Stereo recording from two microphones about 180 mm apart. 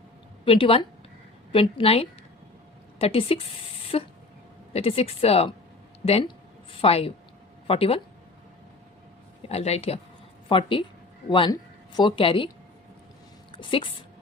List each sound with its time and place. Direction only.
0.4 s a woman's voice: 30° left (ahead or behind)
9.4 s a woman's voice: 35° left (ahead or behind)
13.6 s a woman's voice: 30° left (ahead or behind)